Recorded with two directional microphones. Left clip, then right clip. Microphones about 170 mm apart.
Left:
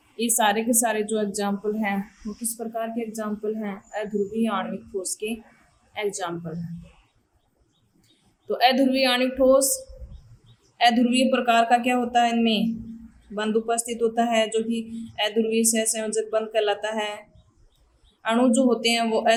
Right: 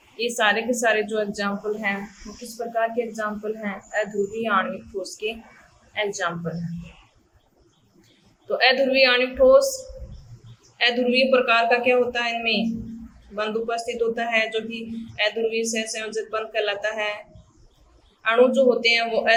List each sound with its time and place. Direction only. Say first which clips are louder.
0.2 s speech: right 1 dB; 30° left (ahead or behind)
8.4 s speech: right 1 dB; 35° left (ahead or behind)
10.8 s speech: even; 35° left (ahead or behind)
18.2 s speech: right 4 dB; 40° left (ahead or behind)